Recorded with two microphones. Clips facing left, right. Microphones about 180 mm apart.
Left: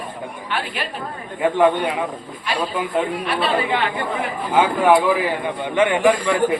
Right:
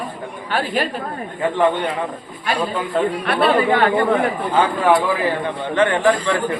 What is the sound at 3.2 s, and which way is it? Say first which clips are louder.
Speech: right 4 dB; 55° right (ahead or behind).